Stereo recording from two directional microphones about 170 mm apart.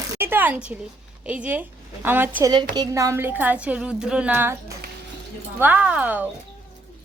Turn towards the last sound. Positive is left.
turn(degrees=-10)  # may be behind; listen again after turning